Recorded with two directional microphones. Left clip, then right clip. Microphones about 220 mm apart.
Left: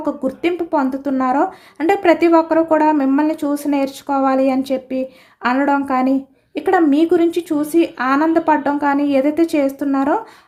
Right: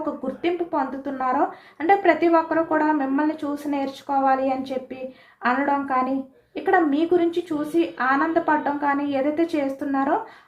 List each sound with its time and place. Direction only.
0.0 s a woman's voice: 55° left (ahead or behind)